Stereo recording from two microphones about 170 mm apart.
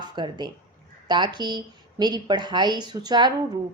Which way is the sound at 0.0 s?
25° right (ahead or behind).